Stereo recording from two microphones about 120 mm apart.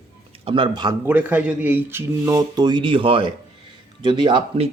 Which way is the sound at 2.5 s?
40° right (ahead or behind).